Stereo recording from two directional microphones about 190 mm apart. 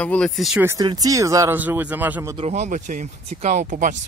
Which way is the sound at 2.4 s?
35° right (ahead or behind).